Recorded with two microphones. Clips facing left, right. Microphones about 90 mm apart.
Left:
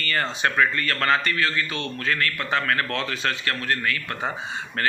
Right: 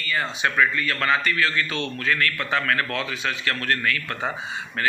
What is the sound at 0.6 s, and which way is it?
Speech, 45° left (ahead or behind).